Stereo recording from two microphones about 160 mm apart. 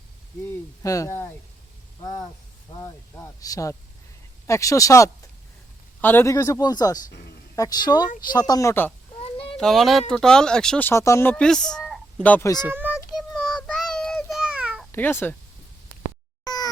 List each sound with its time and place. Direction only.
0.4 s speech: 20° left (ahead or behind)
2.0 s a sound: 20° left (ahead or behind)
4.4 s speech: 20° left (ahead or behind)
9.2 s a sound: 35° left (ahead or behind)
9.6 s speech: centre (ahead or behind)
12.6 s child singing: 10° right (ahead or behind)
14.9 s speech: 15° left (ahead or behind)
16.4 s meow: 25° left (ahead or behind)